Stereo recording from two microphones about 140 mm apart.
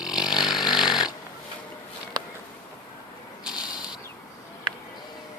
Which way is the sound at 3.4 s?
5° right (ahead or behind).